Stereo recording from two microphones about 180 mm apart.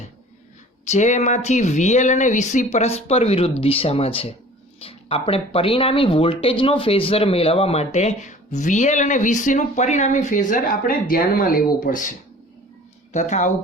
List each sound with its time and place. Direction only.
0.9 s speech: 40° left (ahead or behind)
13.1 s speech: 40° left (ahead or behind)